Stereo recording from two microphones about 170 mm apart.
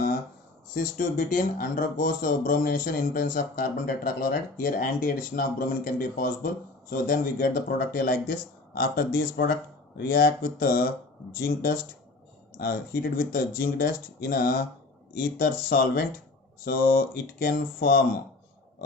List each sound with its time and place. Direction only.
0.7 s speech: 50° left (ahead or behind)